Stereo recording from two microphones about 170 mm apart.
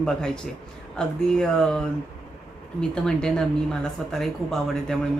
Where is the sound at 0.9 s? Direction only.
5° left (ahead or behind).